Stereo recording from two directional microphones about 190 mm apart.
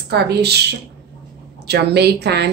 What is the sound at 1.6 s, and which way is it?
Speech, 60° right (ahead or behind).